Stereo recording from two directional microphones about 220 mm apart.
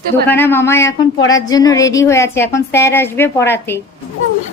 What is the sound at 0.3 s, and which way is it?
Speech, 10° left (ahead or behind).